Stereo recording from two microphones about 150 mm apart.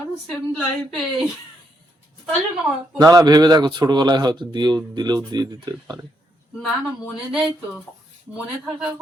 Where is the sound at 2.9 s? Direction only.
25° right (ahead or behind).